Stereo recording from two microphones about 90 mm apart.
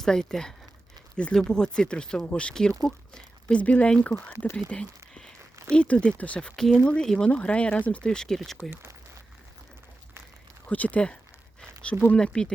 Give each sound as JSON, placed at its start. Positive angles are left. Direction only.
{"t": 0.0, "sound": "speech", "side_deg": 5}
{"t": 8.7, "sound": "speech", "side_deg": -30}
{"t": 10.7, "sound": "speech", "side_deg": 15}